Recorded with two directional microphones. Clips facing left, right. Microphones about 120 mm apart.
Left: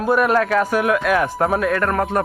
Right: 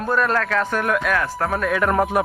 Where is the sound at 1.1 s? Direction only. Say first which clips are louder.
Left 4 dB; 20° left (ahead or behind).